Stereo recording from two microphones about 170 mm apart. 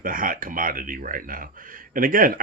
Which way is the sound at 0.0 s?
55° right (ahead or behind).